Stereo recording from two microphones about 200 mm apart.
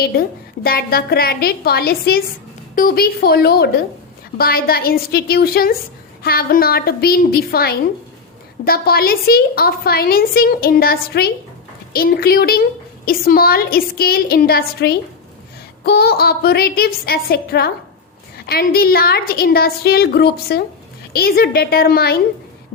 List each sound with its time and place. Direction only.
0.1 s a woman's voice: 50° left (ahead or behind)